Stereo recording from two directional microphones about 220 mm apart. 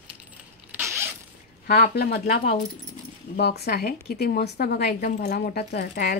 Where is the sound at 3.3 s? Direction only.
45° left (ahead or behind).